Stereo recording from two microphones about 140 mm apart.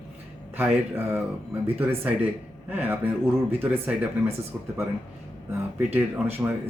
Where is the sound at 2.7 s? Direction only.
10° right (ahead or behind).